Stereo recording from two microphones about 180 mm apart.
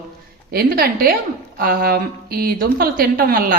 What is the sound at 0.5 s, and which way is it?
A woman's voice, 55° right (ahead or behind).